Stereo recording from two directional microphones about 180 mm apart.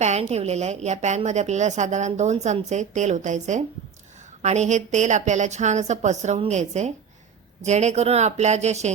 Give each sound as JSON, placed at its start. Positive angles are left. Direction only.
{"t": 0.0, "sound": "a woman's voice", "side_deg": -40}